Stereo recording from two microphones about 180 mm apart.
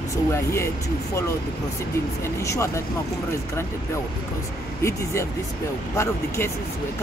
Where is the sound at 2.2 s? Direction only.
15° left (ahead or behind).